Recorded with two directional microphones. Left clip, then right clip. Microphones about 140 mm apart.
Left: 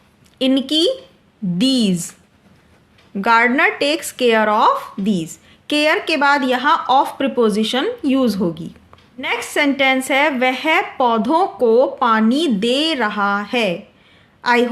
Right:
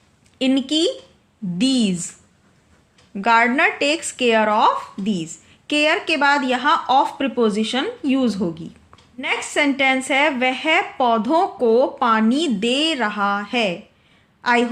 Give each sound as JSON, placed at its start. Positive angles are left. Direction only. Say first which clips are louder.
{"t": 0.3, "sound": "speech", "louder": "left 3 dB", "side_deg": 25}
{"t": 3.2, "sound": "speech", "louder": "left 2 dB", "side_deg": 25}